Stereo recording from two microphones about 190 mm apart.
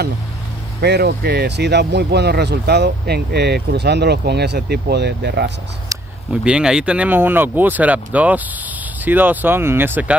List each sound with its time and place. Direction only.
0.7 s speech: 60° right (ahead or behind)
6.3 s speech: 5° right (ahead or behind)